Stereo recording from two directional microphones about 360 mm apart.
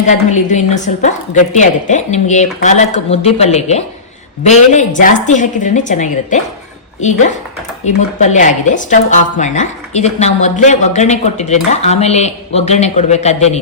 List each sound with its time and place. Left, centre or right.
0.1 s a woman's voice: centre